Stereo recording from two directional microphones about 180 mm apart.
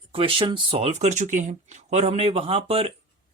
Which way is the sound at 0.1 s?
30° right (ahead or behind).